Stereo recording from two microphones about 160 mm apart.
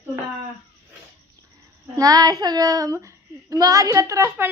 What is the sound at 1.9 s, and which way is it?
Speech, 20° right (ahead or behind).